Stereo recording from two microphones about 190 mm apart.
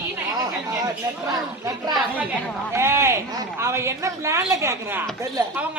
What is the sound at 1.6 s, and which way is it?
A woman's voice, 20° right (ahead or behind).